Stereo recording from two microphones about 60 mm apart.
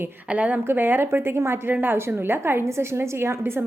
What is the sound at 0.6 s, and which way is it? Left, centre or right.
A woman's voice, right.